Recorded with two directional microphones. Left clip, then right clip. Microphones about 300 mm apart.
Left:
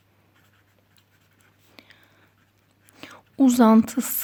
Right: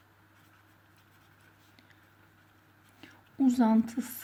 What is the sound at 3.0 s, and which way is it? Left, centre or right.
A woman's voice, left.